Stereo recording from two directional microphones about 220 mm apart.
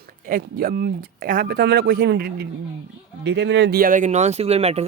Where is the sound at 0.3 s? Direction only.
40° right (ahead or behind).